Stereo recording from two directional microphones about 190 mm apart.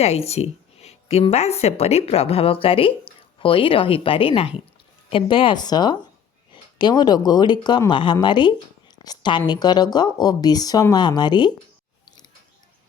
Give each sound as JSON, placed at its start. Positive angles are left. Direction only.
{"t": 0.0, "sound": "a woman's voice", "side_deg": 35}